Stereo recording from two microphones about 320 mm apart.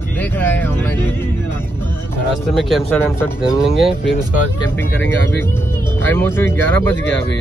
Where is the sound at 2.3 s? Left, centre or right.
Centre.